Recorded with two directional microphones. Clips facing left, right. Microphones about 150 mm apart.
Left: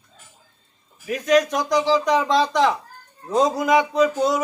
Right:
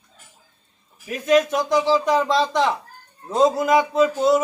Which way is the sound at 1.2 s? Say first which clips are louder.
Right 1 dB; 5° right (ahead or behind).